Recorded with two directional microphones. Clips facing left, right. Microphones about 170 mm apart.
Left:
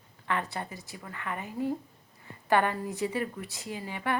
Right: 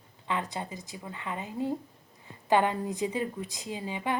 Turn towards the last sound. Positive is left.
turn(degrees=-15)  # may be behind; listen again after turning